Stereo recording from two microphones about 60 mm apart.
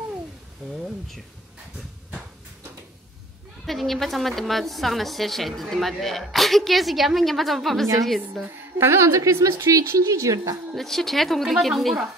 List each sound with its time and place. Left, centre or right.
3.6 s a woman's voice: centre
8.5 s a woman's voice: right
10.7 s a woman's voice: centre